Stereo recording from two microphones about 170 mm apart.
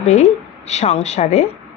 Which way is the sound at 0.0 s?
45° left (ahead or behind).